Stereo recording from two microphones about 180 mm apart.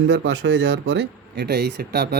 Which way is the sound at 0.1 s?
90° right.